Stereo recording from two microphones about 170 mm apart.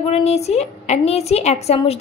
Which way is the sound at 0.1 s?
40° left (ahead or behind).